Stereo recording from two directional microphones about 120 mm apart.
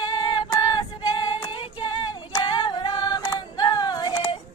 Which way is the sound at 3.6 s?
35° left (ahead or behind).